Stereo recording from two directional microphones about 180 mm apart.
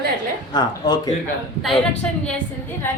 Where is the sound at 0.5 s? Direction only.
25° left (ahead or behind).